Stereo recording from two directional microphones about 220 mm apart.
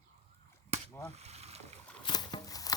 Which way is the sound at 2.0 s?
20° left (ahead or behind).